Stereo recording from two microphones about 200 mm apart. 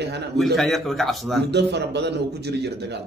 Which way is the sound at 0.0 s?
55° right (ahead or behind).